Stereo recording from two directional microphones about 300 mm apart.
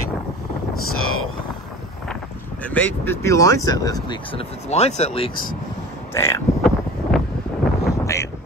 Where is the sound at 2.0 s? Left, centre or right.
Centre.